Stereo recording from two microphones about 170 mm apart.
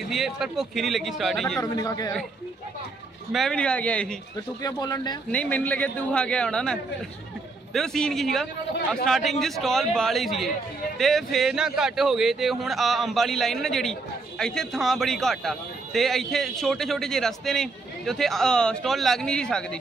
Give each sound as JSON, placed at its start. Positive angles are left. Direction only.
{"t": 0.1, "sound": "a man's voice", "side_deg": 0}
{"t": 1.6, "sound": "speech", "side_deg": 20}
{"t": 3.3, "sound": "a man's voice", "side_deg": 0}
{"t": 4.6, "sound": "speech", "side_deg": 20}
{"t": 5.3, "sound": "a man's voice", "side_deg": 10}